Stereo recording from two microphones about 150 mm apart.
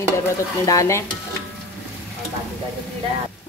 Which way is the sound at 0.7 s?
20° left (ahead or behind).